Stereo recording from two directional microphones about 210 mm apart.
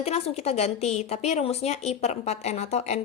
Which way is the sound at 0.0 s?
30° left (ahead or behind).